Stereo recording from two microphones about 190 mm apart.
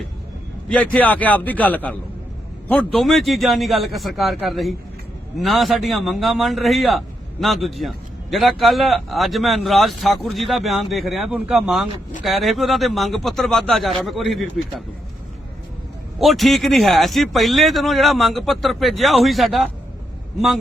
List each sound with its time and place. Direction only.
0.7 s a man's voice: 5° left (ahead or behind)
16.1 s a man's voice: centre (ahead or behind)